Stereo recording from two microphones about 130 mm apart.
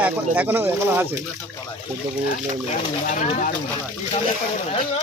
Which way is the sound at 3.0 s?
85° left.